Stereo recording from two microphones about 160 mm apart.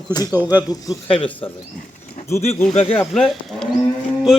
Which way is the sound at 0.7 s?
20° left (ahead or behind).